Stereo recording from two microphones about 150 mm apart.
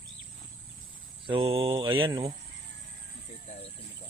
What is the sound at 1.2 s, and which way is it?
Speech, 35° right (ahead or behind).